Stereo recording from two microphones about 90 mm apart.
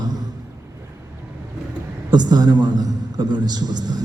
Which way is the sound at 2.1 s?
50° right (ahead or behind).